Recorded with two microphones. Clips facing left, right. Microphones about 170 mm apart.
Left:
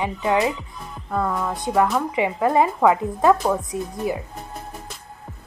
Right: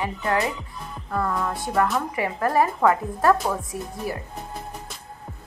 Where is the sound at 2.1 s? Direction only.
20° left (ahead or behind).